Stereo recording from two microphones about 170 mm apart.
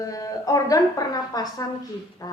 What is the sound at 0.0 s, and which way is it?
A woman's voice, 20° left (ahead or behind).